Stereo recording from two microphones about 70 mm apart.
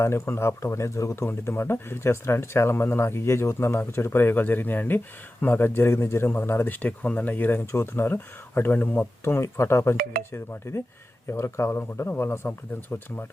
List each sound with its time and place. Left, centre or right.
0.0 s speech: left
7.7 s speech: left